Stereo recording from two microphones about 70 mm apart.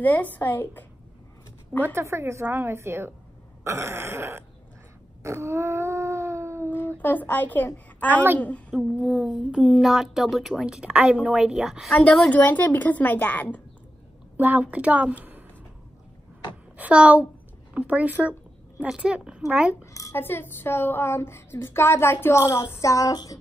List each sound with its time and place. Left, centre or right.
0.0 s a woman's voice: left
2.0 s throat clearing: right
5.2 s wail: right
7.0 s a woman's voice: left
8.1 s speech: right
8.4 s a child's voice: left
9.0 s a sound: centre
9.5 s a woman's voice: centre
11.9 s a woman's voice: centre
14.3 s a woman's voice: right
16.7 s a woman's voice: centre
19.7 s a sound: left
20.2 s a woman's voice: left
22.4 s child singing: left